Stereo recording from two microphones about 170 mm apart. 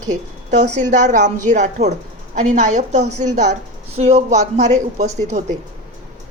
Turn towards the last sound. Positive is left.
turn(degrees=-40)  # may be behind; listen again after turning